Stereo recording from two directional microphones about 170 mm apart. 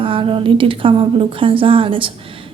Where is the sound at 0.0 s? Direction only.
30° right (ahead or behind).